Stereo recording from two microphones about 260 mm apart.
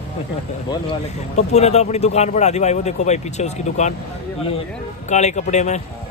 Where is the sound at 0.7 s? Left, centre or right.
Left.